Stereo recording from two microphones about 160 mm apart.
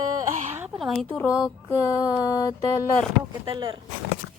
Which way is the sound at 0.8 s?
Centre (ahead or behind).